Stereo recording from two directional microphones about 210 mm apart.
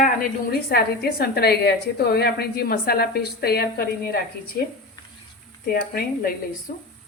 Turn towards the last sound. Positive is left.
turn(degrees=40)  # may be behind; listen again after turning